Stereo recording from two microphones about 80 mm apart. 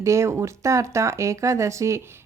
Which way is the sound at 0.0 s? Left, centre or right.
Right.